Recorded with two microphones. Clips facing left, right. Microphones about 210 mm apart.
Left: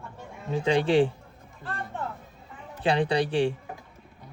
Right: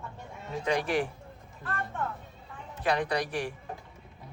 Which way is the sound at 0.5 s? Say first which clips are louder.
Left 6 dB; 30° left (ahead or behind).